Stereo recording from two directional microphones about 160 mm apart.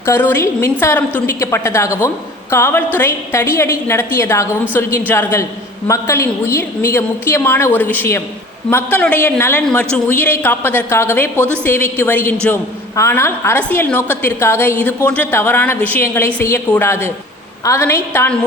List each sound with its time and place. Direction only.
0.0 s a woman's voice: 15° left (ahead or behind)